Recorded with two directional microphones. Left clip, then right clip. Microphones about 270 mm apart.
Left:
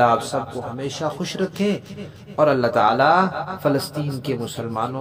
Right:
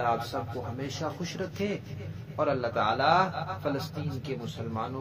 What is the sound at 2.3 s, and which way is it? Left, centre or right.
Speech, left.